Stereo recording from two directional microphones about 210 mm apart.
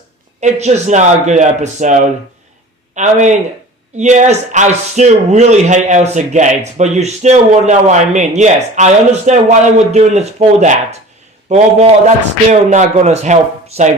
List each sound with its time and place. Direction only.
0.3 s speech: 30° right (ahead or behind)